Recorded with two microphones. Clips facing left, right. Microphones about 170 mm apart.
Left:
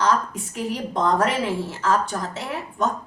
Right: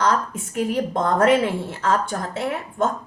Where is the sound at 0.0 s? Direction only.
50° right (ahead or behind).